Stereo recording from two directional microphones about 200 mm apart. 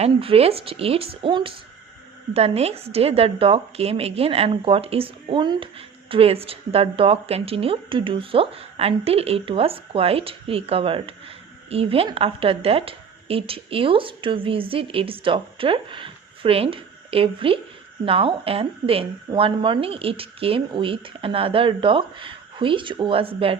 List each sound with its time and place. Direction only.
0.0 s a woman's voice: 30° right (ahead or behind)